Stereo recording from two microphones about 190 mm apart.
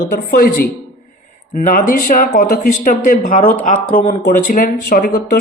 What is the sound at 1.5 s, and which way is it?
Speech, 45° left (ahead or behind).